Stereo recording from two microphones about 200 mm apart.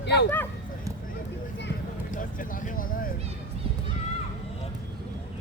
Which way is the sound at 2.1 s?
45° left (ahead or behind).